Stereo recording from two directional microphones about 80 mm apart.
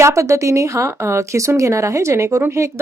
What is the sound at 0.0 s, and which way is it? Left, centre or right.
Speech, right.